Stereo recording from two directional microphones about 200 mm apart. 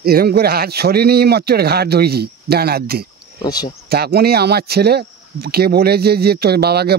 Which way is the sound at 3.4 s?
20° left (ahead or behind).